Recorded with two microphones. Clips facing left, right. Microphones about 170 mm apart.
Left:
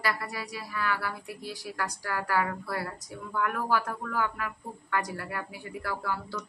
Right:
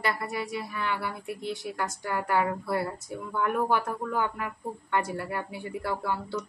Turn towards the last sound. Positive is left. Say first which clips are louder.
# right 3 dB
turn(degrees=-25)  # may be behind; listen again after turning